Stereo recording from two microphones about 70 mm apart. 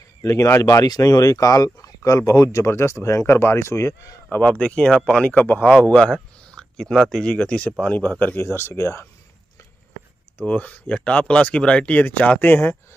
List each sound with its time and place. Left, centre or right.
0.2 s speech: left
4.3 s speech: centre
5.3 s speech: left
10.4 s speech: left